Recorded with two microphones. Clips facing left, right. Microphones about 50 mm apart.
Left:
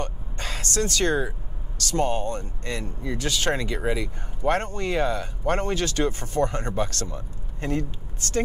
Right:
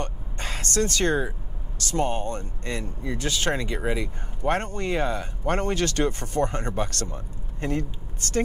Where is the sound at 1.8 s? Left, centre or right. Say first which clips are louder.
Left 1 dB; right.